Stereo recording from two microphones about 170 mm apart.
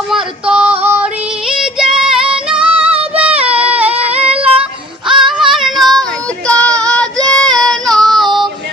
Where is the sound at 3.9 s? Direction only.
35° right (ahead or behind).